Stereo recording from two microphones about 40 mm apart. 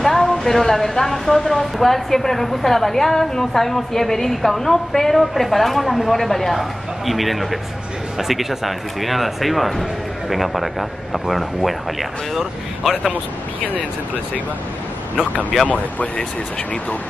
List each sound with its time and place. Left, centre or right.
0.0 s a woman's voice: centre
15.7 s speech: left